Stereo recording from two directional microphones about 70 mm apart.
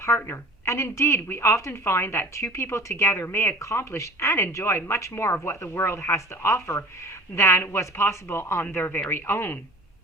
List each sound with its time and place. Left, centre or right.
0.0 s a woman's voice: left